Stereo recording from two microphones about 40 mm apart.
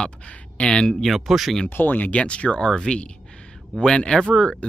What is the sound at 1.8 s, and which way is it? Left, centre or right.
Speech, left.